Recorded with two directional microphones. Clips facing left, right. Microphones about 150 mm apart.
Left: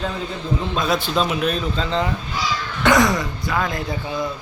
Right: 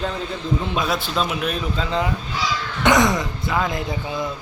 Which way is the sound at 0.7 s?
5° right (ahead or behind).